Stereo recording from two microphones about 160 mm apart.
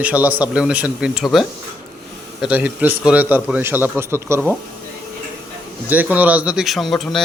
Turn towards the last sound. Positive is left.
turn(degrees=0)  # may be behind; listen again after turning